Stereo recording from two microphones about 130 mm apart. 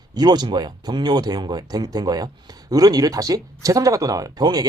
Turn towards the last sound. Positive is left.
turn(degrees=-30)  # may be behind; listen again after turning